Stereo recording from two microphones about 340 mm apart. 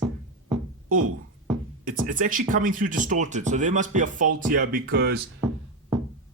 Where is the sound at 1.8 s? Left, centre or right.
Right.